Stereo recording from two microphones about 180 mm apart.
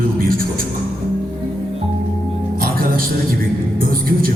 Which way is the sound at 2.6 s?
55° right (ahead or behind).